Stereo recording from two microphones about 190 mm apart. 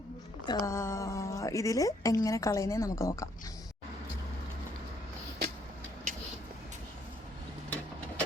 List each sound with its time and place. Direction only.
0.4 s a woman's voice: 15° left (ahead or behind)